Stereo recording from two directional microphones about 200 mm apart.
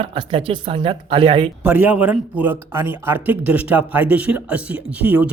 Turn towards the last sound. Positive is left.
turn(degrees=-5)  # may be behind; listen again after turning